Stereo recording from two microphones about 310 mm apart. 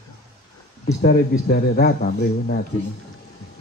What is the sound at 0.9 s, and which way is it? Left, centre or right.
A man's voice, left.